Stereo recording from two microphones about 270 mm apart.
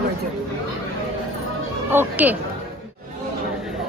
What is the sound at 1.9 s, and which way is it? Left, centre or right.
Speech, centre.